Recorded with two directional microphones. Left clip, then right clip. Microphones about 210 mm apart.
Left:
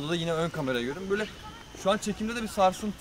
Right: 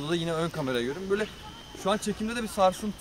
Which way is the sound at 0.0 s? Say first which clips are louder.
Even; centre (ahead or behind).